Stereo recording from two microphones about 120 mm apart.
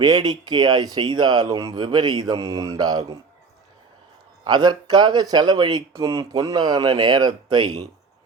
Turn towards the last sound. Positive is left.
turn(degrees=-35)  # may be behind; listen again after turning